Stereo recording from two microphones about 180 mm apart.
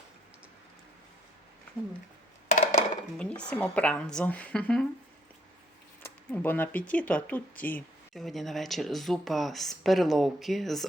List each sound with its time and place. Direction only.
2.6 s a sound: 45° left (ahead or behind)
3.2 s speech: 5° left (ahead or behind)
6.0 s speech: 10° left (ahead or behind)